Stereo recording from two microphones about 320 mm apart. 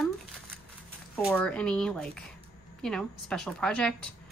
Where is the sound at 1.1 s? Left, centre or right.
Centre.